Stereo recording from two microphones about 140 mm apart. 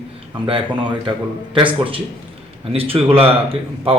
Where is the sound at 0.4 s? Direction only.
35° right (ahead or behind).